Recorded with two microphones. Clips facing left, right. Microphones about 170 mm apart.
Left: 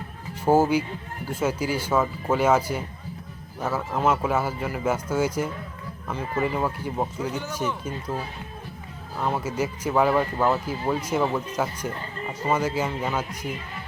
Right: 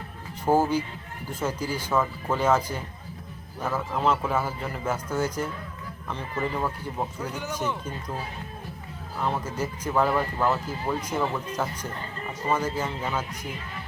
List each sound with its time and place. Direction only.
0.4 s speech: 10° left (ahead or behind)
9.2 s speech: 10° left (ahead or behind)